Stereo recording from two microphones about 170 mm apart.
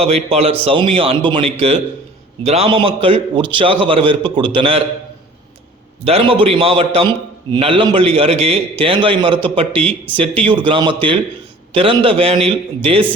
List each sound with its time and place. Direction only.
0.3 s a man's voice: 35° right (ahead or behind)
6.1 s a man's voice: 35° right (ahead or behind)